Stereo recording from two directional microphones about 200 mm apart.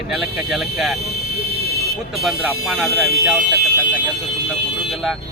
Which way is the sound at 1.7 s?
55° right (ahead or behind).